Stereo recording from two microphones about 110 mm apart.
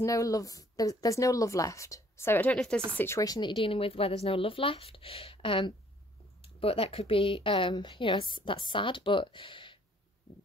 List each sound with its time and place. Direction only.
0.0 s speech: 30° left (ahead or behind); by 2.8 s 10° left (ahead or behind)
3.2 s speech: 40° left (ahead or behind)